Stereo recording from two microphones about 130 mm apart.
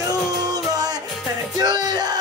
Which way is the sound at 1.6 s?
35° right (ahead or behind).